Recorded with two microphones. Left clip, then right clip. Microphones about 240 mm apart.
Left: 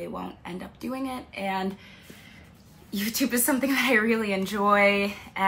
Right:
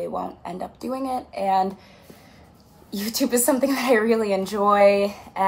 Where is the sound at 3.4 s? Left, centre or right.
Left.